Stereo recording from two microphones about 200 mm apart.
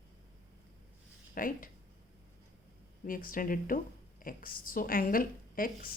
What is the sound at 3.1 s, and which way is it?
A woman's voice, 45° left (ahead or behind).